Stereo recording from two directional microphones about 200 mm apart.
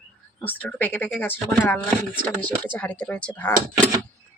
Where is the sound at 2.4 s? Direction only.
25° right (ahead or behind).